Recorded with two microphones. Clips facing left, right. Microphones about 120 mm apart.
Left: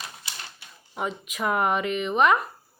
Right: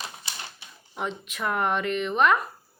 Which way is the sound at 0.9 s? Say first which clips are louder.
Left 1 dB; 5° left (ahead or behind).